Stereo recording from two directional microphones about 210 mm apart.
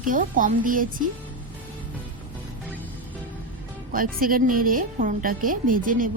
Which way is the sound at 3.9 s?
40° right (ahead or behind).